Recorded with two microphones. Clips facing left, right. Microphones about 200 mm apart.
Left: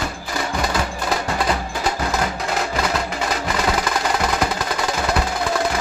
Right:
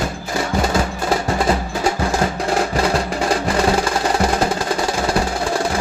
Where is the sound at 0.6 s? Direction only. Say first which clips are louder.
Right 4 dB; 25° right (ahead or behind).